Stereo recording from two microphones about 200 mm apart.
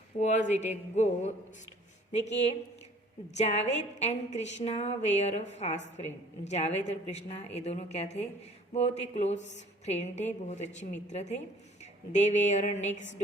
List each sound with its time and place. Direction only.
0.2 s a woman's voice: 35° left (ahead or behind)
3.3 s a woman's voice: 35° left (ahead or behind)